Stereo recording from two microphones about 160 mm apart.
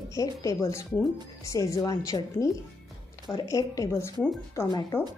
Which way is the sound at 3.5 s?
20° left (ahead or behind).